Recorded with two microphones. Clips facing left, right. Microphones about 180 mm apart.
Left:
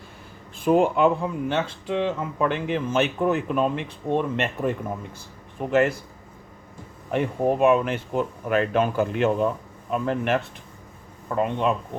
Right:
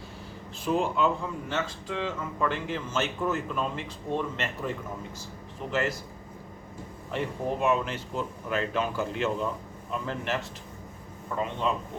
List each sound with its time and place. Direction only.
0.6 s speech: 55° left (ahead or behind)
5.7 s speech: 55° left (ahead or behind)
7.1 s speech: 55° left (ahead or behind)